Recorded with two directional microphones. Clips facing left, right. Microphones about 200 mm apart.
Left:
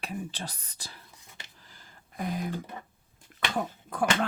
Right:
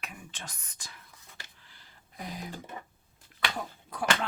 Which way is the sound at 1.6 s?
40° left (ahead or behind).